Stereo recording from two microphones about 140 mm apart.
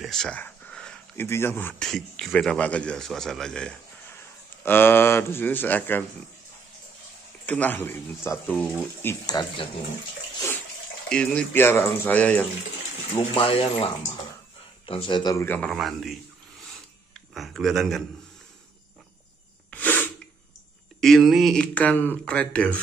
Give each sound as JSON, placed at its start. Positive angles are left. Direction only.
{"t": 0.0, "sound": "a sound", "side_deg": 5}
{"t": 1.2, "sound": "speech", "side_deg": 15}
{"t": 1.9, "sound": "a man's voice", "side_deg": 5}
{"t": 4.1, "sound": "speech", "side_deg": 15}
{"t": 7.4, "sound": "speech", "side_deg": 10}
{"t": 11.1, "sound": "a man's voice", "side_deg": 5}
{"t": 13.3, "sound": "speech", "side_deg": 40}
{"t": 14.9, "sound": "speech", "side_deg": 40}
{"t": 15.3, "sound": "speech", "side_deg": 15}
{"t": 15.7, "sound": "a man's voice", "side_deg": 0}
{"t": 17.3, "sound": "a man's voice", "side_deg": 0}
{"t": 19.7, "sound": "sneeze", "side_deg": 10}
{"t": 21.0, "sound": "speech", "side_deg": 0}